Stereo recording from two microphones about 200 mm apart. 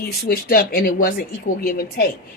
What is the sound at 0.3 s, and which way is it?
Speech, 45° left (ahead or behind).